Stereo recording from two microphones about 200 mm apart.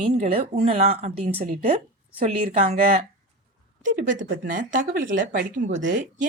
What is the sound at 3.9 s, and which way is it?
A woman's voice, 40° right (ahead or behind).